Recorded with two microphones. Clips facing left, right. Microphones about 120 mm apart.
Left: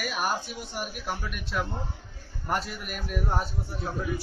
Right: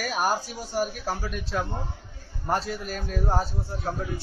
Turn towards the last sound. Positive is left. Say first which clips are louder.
# right 1 dB
turn(degrees=-30)  # may be behind; listen again after turning